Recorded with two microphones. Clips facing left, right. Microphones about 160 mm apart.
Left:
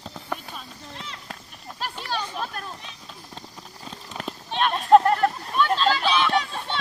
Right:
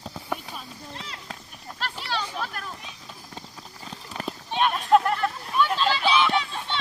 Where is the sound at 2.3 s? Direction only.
20° left (ahead or behind).